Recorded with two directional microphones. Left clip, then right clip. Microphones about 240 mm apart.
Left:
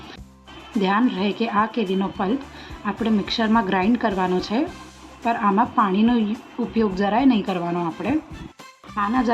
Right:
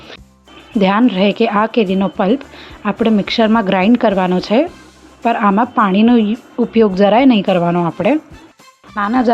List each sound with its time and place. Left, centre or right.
0.8 s speech: right